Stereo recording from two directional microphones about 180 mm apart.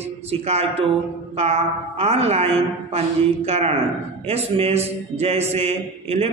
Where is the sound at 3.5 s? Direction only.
35° right (ahead or behind).